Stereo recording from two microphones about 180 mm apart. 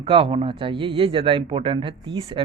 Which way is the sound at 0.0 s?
30° right (ahead or behind).